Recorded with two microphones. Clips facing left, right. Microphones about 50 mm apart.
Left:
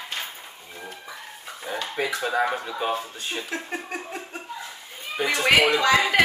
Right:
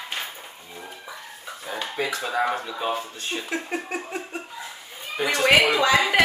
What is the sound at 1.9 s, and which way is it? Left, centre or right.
Speech, centre.